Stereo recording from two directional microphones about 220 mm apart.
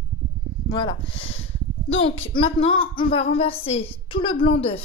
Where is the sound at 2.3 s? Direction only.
25° left (ahead or behind).